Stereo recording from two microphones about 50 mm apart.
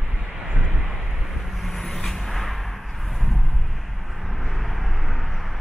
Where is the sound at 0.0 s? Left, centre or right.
Centre.